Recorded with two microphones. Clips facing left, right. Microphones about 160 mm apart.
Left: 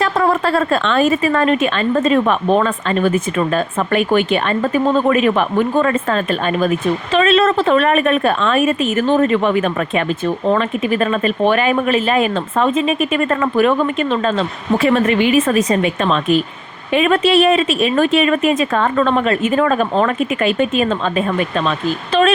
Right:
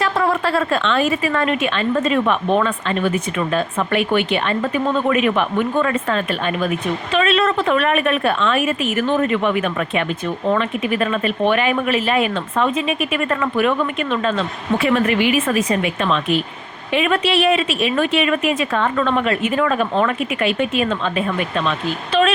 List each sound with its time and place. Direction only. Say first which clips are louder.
0.0 s a woman's voice: left 3 dB; 40° left (ahead or behind)